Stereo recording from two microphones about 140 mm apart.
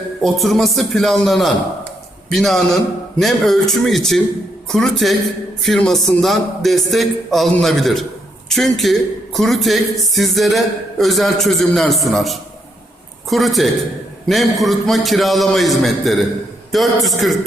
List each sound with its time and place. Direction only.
0.2 s speech: centre (ahead or behind)